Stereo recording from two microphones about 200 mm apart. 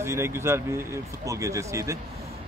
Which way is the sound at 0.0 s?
15° right (ahead or behind).